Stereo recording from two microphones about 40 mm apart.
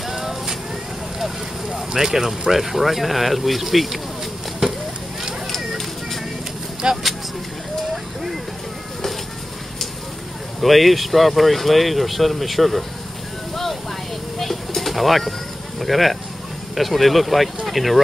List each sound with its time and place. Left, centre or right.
0.0 s vehicle: centre
1.2 s speech: centre
6.8 s vehicle: right
7.9 s a sound: centre
10.6 s speech: centre
14.4 s pigeon: centre
15.8 s speech: centre